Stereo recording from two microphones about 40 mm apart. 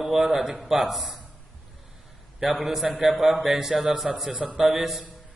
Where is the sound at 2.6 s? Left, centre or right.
Centre.